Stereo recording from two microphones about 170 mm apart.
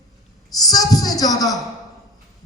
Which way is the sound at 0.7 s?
20° left (ahead or behind).